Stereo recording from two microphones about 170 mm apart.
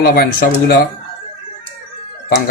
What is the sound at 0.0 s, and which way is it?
Speech, 65° left (ahead or behind).